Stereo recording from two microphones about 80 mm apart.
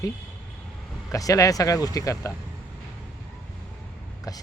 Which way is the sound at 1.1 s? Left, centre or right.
Left.